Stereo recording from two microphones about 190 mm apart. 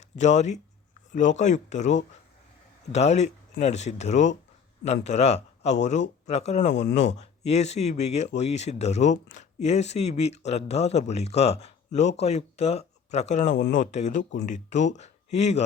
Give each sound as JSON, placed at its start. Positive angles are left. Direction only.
{"t": 0.2, "sound": "speech", "side_deg": 35}